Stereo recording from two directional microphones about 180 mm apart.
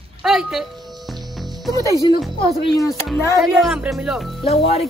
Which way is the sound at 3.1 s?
Centre (ahead or behind).